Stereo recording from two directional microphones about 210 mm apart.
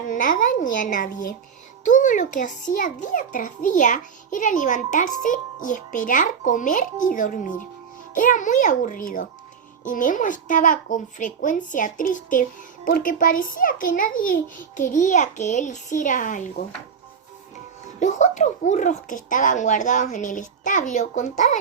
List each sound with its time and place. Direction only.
0.1 s a child's voice: 40° left (ahead or behind)
18.0 s a child's voice: 35° left (ahead or behind)